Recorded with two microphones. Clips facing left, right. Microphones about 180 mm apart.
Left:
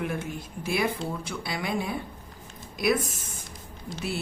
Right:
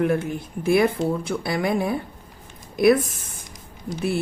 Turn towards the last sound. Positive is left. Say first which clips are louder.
# right 8 dB
turn(degrees=-50)  # may be behind; listen again after turning